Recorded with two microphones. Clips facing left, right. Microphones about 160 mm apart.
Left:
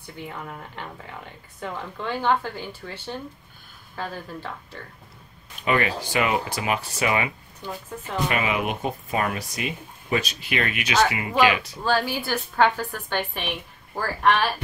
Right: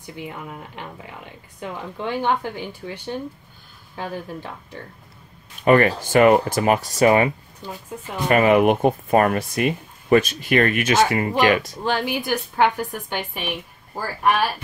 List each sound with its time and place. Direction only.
0.0 s a woman's voice: 15° right (ahead or behind)
5.7 s speech: 50° right (ahead or behind)
8.3 s speech: 50° right (ahead or behind)
11.8 s a woman's voice: 20° right (ahead or behind)